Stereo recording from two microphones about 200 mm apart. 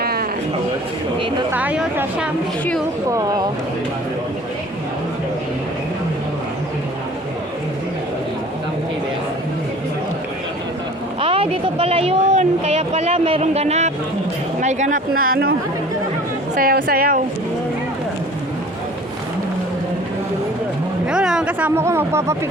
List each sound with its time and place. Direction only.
0.0 s a sound: 50° right (ahead or behind)
1.5 s speech: 10° right (ahead or behind)
3.1 s speech: 15° right (ahead or behind)
11.2 s speech: 30° right (ahead or behind); by 15.5 s 45° right (ahead or behind)
16.6 s a woman's voice: 50° right (ahead or behind)
21.1 s speech: 5° right (ahead or behind)